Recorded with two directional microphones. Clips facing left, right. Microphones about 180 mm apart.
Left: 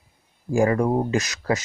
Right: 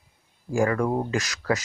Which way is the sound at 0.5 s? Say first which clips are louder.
Left 3 dB; 25° left (ahead or behind).